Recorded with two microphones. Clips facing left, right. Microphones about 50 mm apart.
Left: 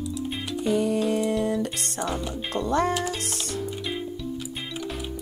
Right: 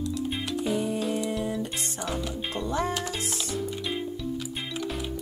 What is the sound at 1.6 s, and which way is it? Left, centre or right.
Speech, left.